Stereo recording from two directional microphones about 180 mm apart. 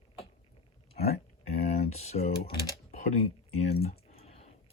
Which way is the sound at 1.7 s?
40° left (ahead or behind).